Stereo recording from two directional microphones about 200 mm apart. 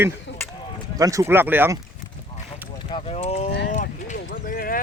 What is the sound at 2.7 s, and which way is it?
Speech, 25° left (ahead or behind).